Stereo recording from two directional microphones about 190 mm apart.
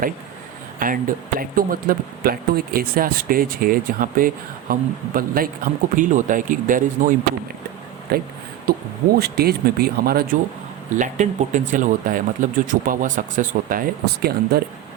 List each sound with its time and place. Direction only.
0.8 s speech: 45° right (ahead or behind)
8.1 s speech: 55° right (ahead or behind)
10.9 s speech: 40° right (ahead or behind)